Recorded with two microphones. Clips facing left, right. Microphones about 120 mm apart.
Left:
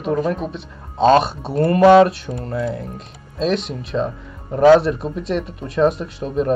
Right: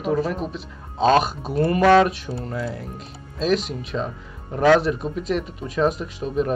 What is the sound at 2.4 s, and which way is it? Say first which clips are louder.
Speech: left 7 dB; centre (ahead or behind).